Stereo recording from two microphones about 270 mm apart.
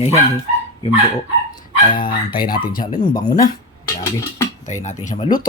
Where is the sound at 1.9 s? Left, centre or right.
Centre.